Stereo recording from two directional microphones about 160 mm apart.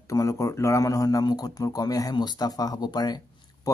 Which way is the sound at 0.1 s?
20° left (ahead or behind).